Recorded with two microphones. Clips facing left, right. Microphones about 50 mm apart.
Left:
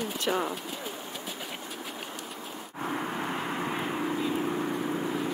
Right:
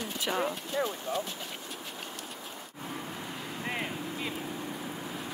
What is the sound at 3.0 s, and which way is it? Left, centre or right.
Vehicle, left.